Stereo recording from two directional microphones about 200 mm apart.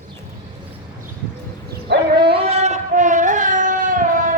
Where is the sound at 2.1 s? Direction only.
25° right (ahead or behind).